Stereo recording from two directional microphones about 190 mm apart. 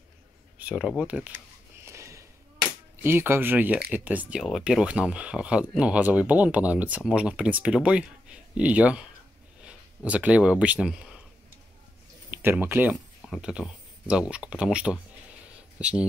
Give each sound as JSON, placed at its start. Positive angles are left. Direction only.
{"t": 0.6, "sound": "speech", "side_deg": -5}
{"t": 1.9, "sound": "a sound", "side_deg": -15}
{"t": 3.0, "sound": "speech", "side_deg": -10}
{"t": 12.3, "sound": "speech", "side_deg": -10}
{"t": 12.9, "sound": "speech", "side_deg": 0}